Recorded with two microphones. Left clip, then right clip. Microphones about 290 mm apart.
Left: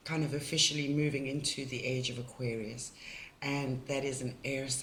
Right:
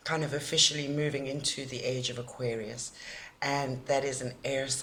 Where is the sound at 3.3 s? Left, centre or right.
Centre.